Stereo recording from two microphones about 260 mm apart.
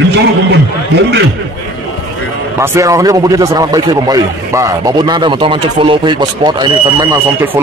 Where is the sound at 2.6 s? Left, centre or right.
Centre.